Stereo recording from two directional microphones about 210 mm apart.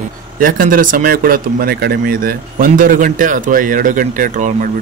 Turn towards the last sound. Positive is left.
turn(degrees=-40)  # may be behind; listen again after turning